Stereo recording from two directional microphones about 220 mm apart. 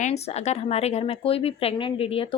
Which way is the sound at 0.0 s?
30° left (ahead or behind).